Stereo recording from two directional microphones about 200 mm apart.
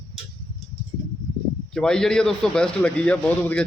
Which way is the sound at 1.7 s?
5° left (ahead or behind).